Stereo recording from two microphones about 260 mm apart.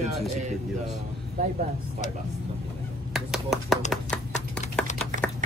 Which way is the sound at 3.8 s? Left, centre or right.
Centre.